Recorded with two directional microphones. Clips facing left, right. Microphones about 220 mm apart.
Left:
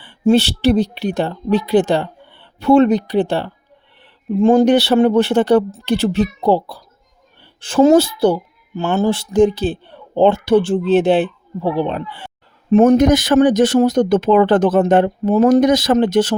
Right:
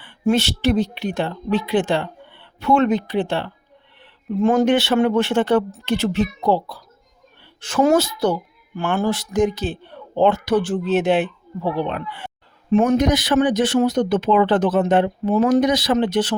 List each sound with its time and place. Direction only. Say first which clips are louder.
0.0 s speech: left 5 dB; 30° left (ahead or behind)